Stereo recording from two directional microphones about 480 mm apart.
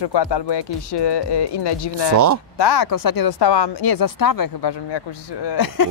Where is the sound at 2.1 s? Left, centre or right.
Right.